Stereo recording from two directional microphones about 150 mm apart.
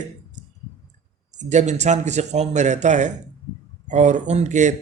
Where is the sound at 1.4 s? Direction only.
50° right (ahead or behind).